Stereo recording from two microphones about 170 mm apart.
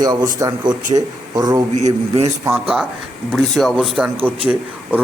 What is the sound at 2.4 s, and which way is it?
A man's voice, 10° right (ahead or behind).